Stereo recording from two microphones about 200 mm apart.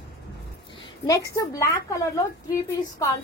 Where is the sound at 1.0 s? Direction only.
15° left (ahead or behind).